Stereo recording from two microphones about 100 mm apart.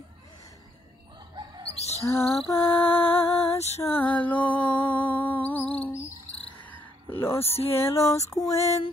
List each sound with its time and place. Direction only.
1.3 s bird: 35° right (ahead or behind)
2.0 s a sound: 25° left (ahead or behind)
2.5 s music: 20° left (ahead or behind)
3.2 s music: 75° left (ahead or behind); by 3.8 s 90° left
4.1 s music: 15° left (ahead or behind)
6.7 s cricket: 20° left (ahead or behind)
7.4 s music: 85° left
7.7 s a sound: 25° left (ahead or behind)
8.1 s music: 30° left (ahead or behind)